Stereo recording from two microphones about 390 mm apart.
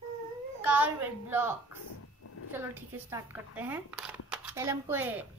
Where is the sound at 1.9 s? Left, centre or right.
Left.